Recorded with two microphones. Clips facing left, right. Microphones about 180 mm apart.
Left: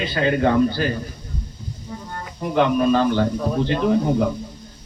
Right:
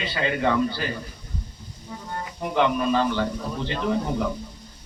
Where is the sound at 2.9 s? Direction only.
50° left (ahead or behind).